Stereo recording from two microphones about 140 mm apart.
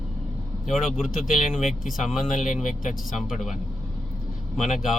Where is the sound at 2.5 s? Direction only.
65° left (ahead or behind).